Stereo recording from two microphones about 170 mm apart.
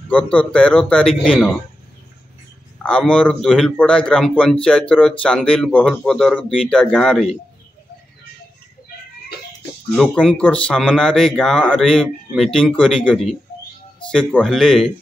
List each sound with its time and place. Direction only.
0.1 s a man's voice: 10° left (ahead or behind)
2.8 s a man's voice: 5° left (ahead or behind)
9.9 s a man's voice: 5° left (ahead or behind)